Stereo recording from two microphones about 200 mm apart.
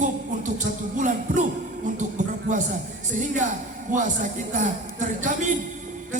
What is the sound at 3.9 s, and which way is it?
Speech, 40° right (ahead or behind).